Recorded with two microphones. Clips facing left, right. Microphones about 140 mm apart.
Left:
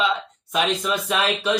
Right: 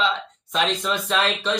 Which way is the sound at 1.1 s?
10° left (ahead or behind).